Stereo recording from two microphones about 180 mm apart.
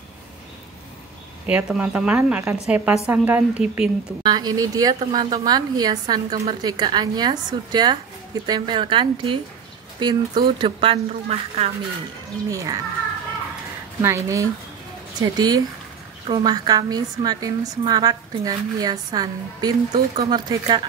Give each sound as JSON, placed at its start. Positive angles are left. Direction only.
{"t": 1.4, "sound": "a woman's voice", "side_deg": -10}
{"t": 4.2, "sound": "a woman's voice", "side_deg": -25}
{"t": 12.4, "sound": "a woman's voice", "side_deg": -20}
{"t": 14.0, "sound": "a woman's voice", "side_deg": -15}